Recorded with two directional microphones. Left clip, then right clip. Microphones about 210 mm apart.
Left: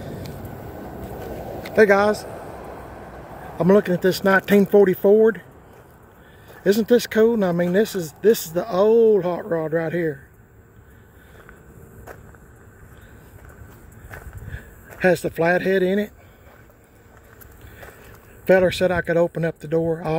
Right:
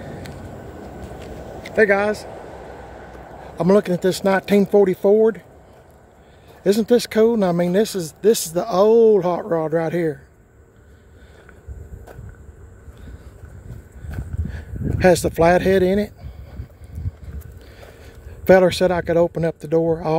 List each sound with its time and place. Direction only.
1.8 s speech: 10° left (ahead or behind)
2.1 s vehicle: 55° left (ahead or behind)
3.5 s speech: 5° right (ahead or behind)
6.5 s speech: 10° right (ahead or behind)
15.0 s speech: 20° right (ahead or behind)
18.5 s speech: 20° right (ahead or behind)